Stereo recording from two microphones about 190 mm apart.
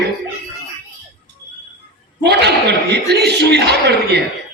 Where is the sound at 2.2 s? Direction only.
60° right (ahead or behind).